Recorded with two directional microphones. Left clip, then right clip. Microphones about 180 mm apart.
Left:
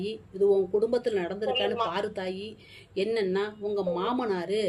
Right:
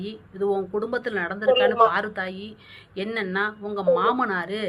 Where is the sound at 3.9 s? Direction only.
45° left (ahead or behind).